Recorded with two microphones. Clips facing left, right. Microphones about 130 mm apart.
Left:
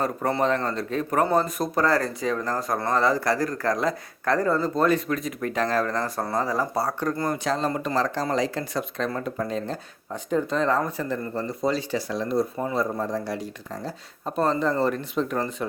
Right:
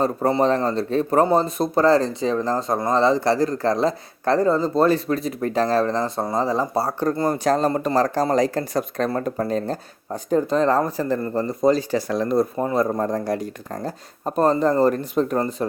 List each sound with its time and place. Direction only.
0.0 s a man's voice: 25° right (ahead or behind)